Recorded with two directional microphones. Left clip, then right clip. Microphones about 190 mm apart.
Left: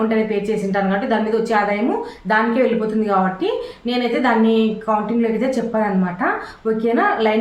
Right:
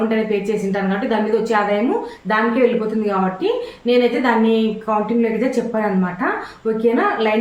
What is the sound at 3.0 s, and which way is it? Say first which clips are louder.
A woman's voice: left 2 dB; 15° left (ahead or behind).